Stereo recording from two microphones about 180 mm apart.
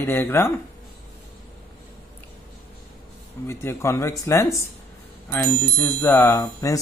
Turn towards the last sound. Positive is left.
turn(degrees=20)  # may be behind; listen again after turning